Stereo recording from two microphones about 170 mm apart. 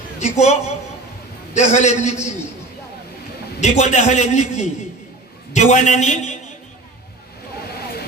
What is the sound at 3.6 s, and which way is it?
A man's voice, 45° left (ahead or behind).